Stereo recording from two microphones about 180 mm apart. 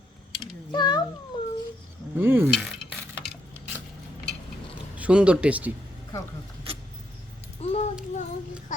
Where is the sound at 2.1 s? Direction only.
10° right (ahead or behind).